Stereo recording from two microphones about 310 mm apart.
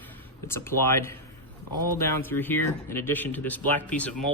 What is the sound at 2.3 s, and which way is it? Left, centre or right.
Speech, centre.